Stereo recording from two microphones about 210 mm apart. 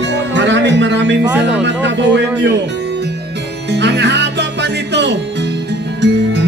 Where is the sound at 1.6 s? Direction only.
55° right (ahead or behind).